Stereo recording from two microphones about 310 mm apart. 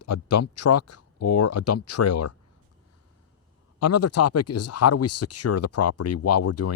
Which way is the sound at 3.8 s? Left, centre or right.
Left.